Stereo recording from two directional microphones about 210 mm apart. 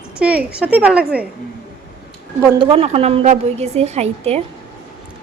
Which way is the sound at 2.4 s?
15° right (ahead or behind).